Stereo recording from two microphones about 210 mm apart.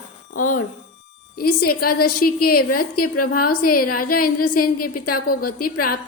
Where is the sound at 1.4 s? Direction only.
45° left (ahead or behind).